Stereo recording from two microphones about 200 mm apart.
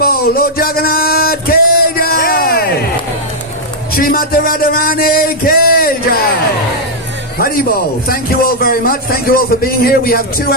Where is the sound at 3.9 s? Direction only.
45° left (ahead or behind).